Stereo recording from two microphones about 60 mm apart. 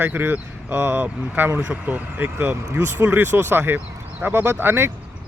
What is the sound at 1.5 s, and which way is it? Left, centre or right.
Speech, right.